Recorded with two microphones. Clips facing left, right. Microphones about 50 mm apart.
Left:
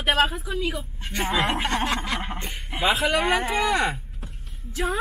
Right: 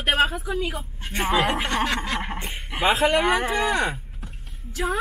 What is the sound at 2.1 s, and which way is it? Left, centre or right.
Speech, centre.